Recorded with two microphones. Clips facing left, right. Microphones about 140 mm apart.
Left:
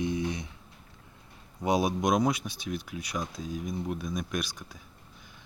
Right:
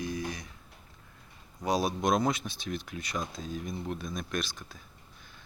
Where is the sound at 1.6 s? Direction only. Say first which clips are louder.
Left 2 dB; 20° left (ahead or behind).